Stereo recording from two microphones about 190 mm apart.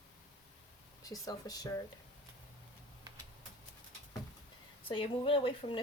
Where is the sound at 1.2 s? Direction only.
20° left (ahead or behind).